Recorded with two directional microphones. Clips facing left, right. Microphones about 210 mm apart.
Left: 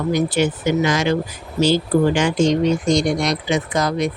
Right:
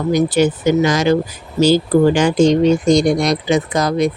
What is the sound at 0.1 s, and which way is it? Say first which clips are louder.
Speech: right 5 dB; 40° right (ahead or behind).